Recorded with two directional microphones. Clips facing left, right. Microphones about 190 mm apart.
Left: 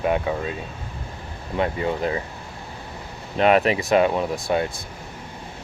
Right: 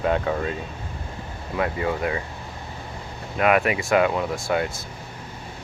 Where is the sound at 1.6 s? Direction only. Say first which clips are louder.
Left 1 dB; 25° left (ahead or behind).